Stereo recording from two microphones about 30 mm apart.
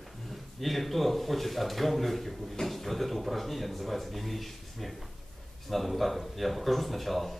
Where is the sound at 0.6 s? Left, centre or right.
Centre.